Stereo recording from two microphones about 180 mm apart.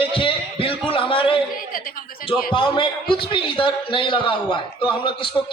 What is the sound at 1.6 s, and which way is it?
Chuckle, 50° left (ahead or behind).